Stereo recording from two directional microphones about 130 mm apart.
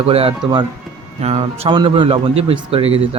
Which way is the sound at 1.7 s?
40° right (ahead or behind).